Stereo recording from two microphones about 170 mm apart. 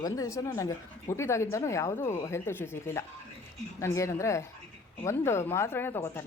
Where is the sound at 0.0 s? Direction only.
20° left (ahead or behind).